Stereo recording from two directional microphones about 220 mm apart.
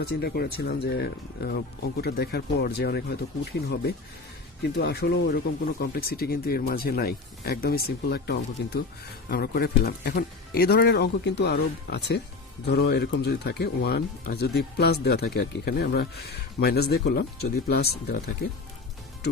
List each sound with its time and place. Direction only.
0.0 s speech: 45° left (ahead or behind)